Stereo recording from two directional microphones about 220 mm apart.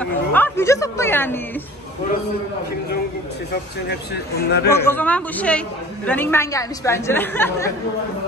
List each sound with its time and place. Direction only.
0.0 s chatter: 10° left (ahead or behind)
3.9 s speech: 50° left (ahead or behind)
4.8 s speech: 5° left (ahead or behind)